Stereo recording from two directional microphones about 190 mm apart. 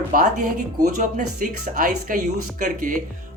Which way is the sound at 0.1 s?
45° right (ahead or behind).